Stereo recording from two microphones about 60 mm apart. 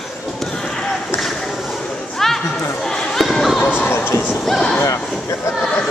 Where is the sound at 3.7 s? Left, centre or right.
Left.